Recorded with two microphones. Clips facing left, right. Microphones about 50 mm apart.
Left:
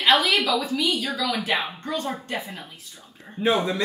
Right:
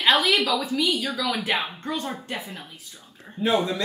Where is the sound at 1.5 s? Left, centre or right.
Right.